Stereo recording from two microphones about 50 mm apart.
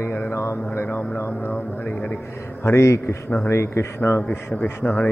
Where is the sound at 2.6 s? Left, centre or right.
Left.